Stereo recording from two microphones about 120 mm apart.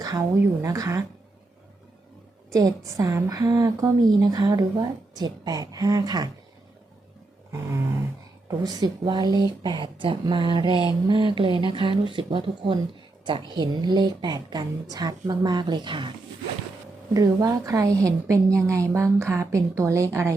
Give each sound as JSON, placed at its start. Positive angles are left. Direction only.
{"t": 0.0, "sound": "a woman's voice", "side_deg": -30}
{"t": 2.5, "sound": "a woman's voice", "side_deg": -30}
{"t": 8.4, "sound": "a woman's voice", "side_deg": -30}
{"t": 17.2, "sound": "a woman's voice", "side_deg": -30}